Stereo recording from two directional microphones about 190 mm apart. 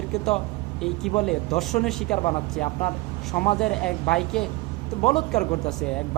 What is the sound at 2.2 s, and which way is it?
Speech, 30° left (ahead or behind).